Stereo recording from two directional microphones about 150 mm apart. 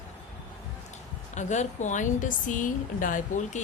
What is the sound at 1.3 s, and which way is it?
Speech, 50° left (ahead or behind).